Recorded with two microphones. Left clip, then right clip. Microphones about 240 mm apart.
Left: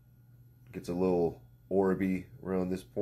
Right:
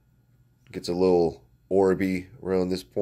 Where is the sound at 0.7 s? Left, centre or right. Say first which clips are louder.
Right 9 dB; right.